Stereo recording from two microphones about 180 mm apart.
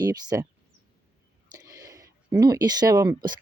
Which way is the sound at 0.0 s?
20° right (ahead or behind).